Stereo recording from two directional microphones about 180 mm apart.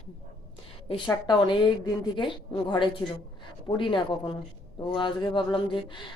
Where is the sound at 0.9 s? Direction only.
25° left (ahead or behind).